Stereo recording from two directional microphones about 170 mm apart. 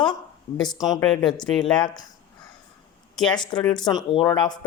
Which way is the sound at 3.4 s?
25° left (ahead or behind).